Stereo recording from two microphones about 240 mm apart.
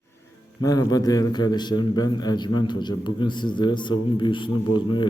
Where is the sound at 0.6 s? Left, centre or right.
Centre.